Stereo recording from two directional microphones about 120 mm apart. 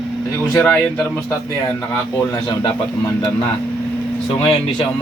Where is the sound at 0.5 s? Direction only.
15° left (ahead or behind).